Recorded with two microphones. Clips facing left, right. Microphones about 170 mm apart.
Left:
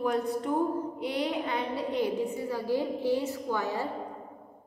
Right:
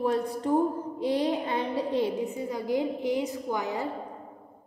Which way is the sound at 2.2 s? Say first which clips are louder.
Even; 20° right (ahead or behind).